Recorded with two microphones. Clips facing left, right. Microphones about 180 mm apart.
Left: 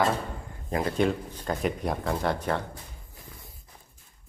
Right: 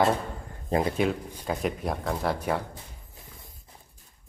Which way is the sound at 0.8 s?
5° right (ahead or behind).